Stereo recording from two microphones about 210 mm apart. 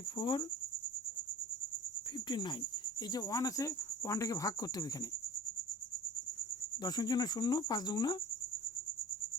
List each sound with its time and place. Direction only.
0.2 s speech: 20° left (ahead or behind)
2.1 s speech: 20° left (ahead or behind)
6.8 s speech: 20° left (ahead or behind)